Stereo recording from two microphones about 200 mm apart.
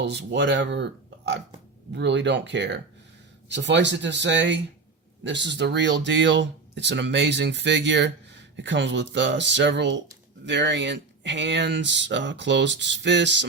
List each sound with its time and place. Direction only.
0.0 s speech: 60° right (ahead or behind)
1.9 s speech: 60° right (ahead or behind)